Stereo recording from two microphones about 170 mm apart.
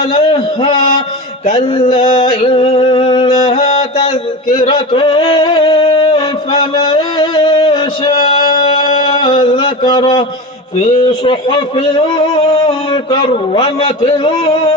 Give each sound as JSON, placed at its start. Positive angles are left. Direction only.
{"t": 0.1, "sound": "a man's voice", "side_deg": 35}
{"t": 1.5, "sound": "music", "side_deg": 30}
{"t": 4.6, "sound": "a sound", "side_deg": 30}
{"t": 10.8, "sound": "a man's voice", "side_deg": 35}